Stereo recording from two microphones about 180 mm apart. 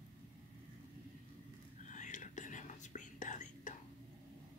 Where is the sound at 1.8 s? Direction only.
45° left (ahead or behind).